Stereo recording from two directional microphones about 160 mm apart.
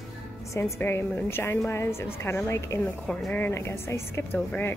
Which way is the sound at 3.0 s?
5° left (ahead or behind).